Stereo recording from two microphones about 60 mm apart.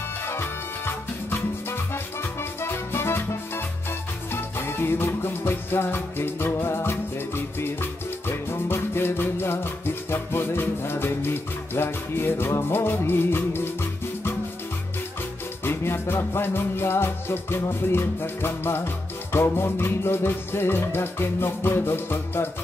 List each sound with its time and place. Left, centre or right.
0.2 s music: left
15.6 s music: left